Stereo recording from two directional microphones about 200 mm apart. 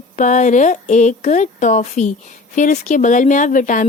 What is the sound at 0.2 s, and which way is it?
Speech, 40° left (ahead or behind).